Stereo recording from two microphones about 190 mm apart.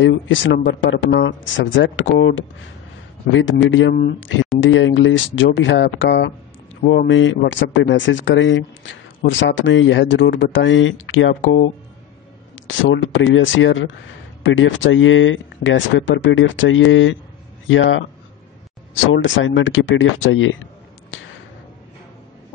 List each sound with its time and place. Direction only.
0.0 s speech: 75° left (ahead or behind)
3.3 s speech: 90° left
17.6 s speech: 80° left
21.1 s a sound: 90° left